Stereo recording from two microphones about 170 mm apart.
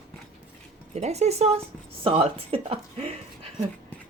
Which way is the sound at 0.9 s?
40° right (ahead or behind).